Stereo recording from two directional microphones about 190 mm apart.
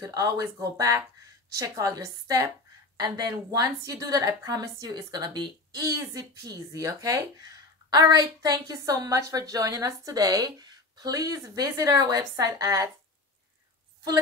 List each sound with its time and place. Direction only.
0.0 s a woman's voice: 20° right (ahead or behind)